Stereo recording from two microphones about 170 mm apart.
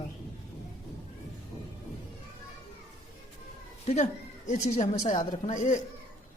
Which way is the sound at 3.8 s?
45° left (ahead or behind).